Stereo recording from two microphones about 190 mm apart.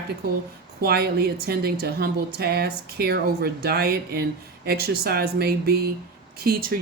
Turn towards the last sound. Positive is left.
turn(degrees=-50)  # may be behind; listen again after turning